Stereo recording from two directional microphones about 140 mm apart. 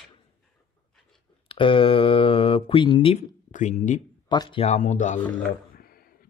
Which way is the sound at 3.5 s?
60° left (ahead or behind).